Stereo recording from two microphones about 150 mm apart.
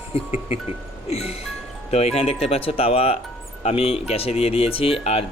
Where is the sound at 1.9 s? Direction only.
45° left (ahead or behind).